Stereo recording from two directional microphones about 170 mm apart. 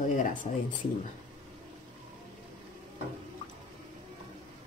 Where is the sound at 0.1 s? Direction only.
50° left (ahead or behind).